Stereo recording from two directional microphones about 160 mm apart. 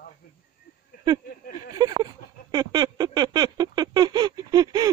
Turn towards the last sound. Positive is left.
turn(degrees=-25)  # may be behind; listen again after turning